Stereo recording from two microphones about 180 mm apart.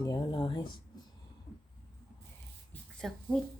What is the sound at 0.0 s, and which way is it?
Speech, 20° left (ahead or behind).